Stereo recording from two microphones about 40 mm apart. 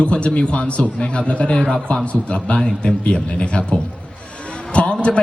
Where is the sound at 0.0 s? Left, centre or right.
Left.